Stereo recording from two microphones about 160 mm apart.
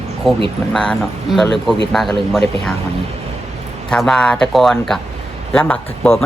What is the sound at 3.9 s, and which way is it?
Speech, 5° left (ahead or behind).